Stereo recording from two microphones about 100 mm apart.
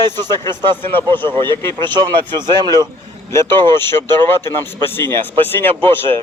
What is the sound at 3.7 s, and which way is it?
Speech, 25° left (ahead or behind).